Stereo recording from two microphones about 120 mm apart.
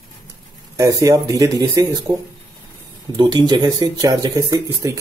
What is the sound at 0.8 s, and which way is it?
Speech, 30° right (ahead or behind).